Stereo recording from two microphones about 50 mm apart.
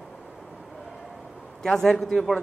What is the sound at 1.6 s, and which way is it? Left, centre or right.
Speech, centre.